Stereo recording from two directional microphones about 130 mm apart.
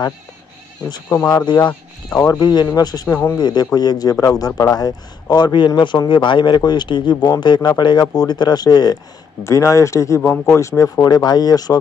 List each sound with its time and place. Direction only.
0.8 s a man's voice: 30° left (ahead or behind)